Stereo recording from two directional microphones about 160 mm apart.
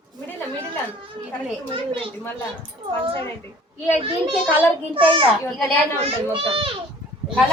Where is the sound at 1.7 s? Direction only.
35° right (ahead or behind).